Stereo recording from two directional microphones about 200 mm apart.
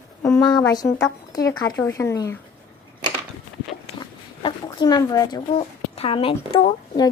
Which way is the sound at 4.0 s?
20° left (ahead or behind).